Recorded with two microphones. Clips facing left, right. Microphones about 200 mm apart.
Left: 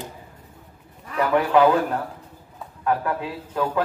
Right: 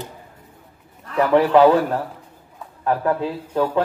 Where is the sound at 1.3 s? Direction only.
30° right (ahead or behind).